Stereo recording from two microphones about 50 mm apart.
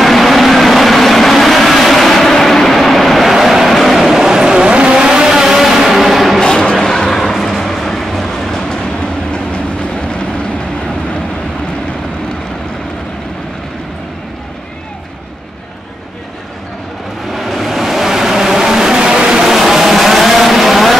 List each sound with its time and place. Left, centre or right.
0.0 s vehicle: centre
6.4 s a sound: centre
17.3 s vehicle: centre